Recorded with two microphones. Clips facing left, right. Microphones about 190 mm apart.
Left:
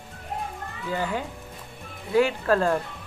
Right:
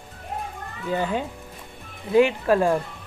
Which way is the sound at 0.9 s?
20° right (ahead or behind).